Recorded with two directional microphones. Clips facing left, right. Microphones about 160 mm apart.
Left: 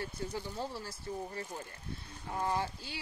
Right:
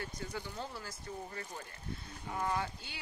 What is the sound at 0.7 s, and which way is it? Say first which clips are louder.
Speech: left 4 dB; 30° left (ahead or behind).